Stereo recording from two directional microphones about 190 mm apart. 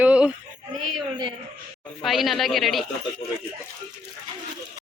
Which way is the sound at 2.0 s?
Centre (ahead or behind).